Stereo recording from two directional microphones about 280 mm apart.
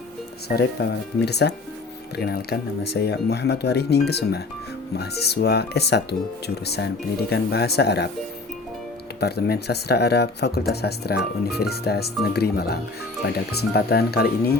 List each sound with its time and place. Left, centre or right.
0.4 s speech: left
7.3 s speech: left
9.2 s speech: left